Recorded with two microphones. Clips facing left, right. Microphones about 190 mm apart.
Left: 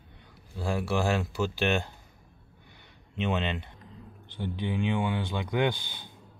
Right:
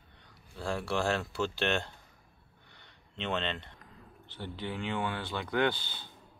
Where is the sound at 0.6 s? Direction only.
5° left (ahead or behind).